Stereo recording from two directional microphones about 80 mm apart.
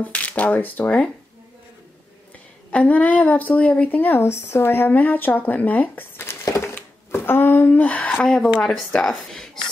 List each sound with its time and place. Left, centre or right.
0.0 s a woman's voice: centre
2.7 s a woman's voice: centre
6.6 s a sound: left
8.1 s a woman's voice: centre